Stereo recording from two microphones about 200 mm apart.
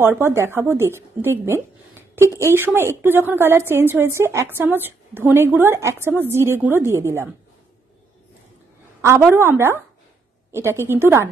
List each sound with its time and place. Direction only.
0.2 s a woman's voice: 15° right (ahead or behind)
9.0 s a woman's voice: 10° right (ahead or behind)